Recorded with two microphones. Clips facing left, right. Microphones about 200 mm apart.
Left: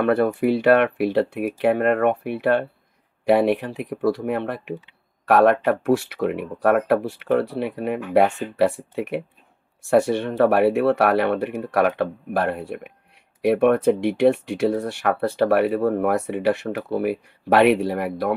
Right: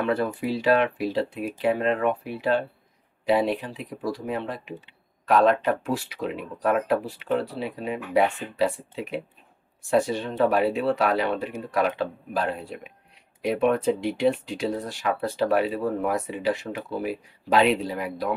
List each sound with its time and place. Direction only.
0.0 s speech: 60° left (ahead or behind)